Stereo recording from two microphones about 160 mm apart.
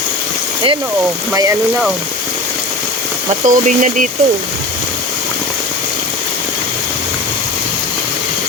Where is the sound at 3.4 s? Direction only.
55° right (ahead or behind).